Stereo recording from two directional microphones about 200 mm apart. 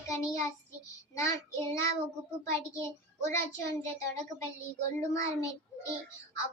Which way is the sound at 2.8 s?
15° left (ahead or behind).